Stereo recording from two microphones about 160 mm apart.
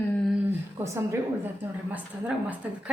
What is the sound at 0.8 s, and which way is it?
A woman's voice, 15° right (ahead or behind).